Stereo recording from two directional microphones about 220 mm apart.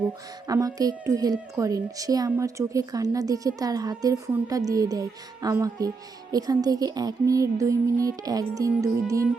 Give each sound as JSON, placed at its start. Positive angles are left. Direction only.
{"t": 0.4, "sound": "a woman's voice", "side_deg": -15}